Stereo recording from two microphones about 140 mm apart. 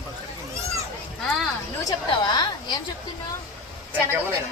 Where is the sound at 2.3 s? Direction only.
30° left (ahead or behind).